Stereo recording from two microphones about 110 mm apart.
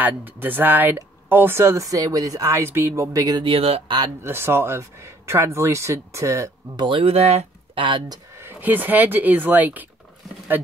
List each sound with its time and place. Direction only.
0.0 s speech: 15° right (ahead or behind)
3.1 s speech: 35° right (ahead or behind)
3.4 s speech: 65° right (ahead or behind)
3.8 s speech: 45° right (ahead or behind)
4.2 s speech: 20° right (ahead or behind)
6.8 s speech: 55° right (ahead or behind)
8.4 s speech: 20° right (ahead or behind)